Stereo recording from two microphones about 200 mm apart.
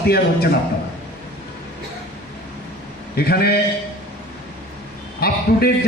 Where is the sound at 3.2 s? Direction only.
50° left (ahead or behind).